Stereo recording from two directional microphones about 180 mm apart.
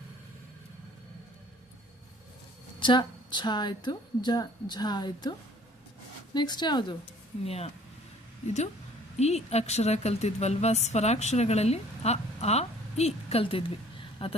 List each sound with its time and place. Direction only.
2.8 s a woman's voice: 25° left (ahead or behind)
6.3 s a woman's voice: 25° left (ahead or behind)
9.1 s a woman's voice: 35° left (ahead or behind)